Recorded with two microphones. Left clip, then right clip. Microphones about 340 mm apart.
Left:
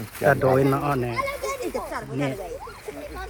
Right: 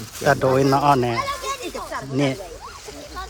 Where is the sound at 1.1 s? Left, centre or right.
Left.